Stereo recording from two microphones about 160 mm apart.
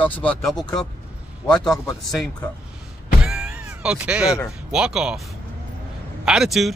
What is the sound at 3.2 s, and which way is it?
Music, 5° right (ahead or behind).